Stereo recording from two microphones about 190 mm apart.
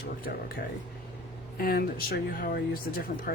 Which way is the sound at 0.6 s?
55° left (ahead or behind).